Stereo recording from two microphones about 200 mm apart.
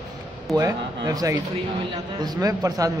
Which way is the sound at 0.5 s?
15° right (ahead or behind).